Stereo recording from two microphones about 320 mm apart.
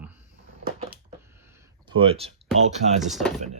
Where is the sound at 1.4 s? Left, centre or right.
Centre.